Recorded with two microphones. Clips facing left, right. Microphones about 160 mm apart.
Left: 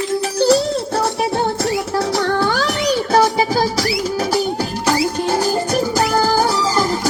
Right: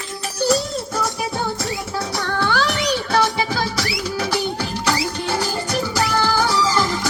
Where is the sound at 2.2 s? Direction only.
40° left (ahead or behind).